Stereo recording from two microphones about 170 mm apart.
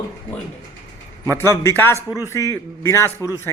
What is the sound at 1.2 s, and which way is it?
A man's voice, 15° left (ahead or behind).